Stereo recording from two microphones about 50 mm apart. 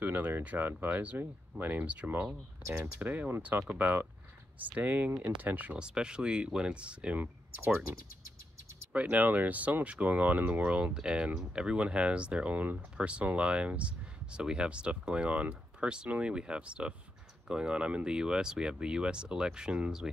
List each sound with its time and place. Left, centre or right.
0.0 s a sound: right
0.6 s speech: right
0.8 s speech: right
2.7 s speech: right
5.8 s speech: centre
7.2 s speech: right
8.9 s speech: right